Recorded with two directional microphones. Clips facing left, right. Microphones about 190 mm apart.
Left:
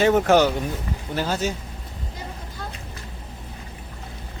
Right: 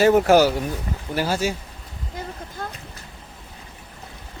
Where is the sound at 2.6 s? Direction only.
50° right (ahead or behind).